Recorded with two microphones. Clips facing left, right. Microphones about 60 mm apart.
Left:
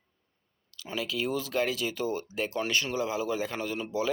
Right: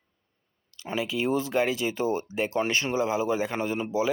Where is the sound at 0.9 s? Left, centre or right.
Right.